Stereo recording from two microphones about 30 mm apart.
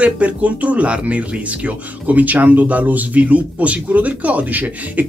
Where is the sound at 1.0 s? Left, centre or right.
Right.